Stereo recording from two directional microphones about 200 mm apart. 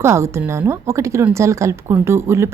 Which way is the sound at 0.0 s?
15° right (ahead or behind).